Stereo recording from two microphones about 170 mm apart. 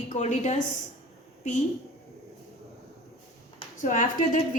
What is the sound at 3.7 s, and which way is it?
Speech, 50° left (ahead or behind).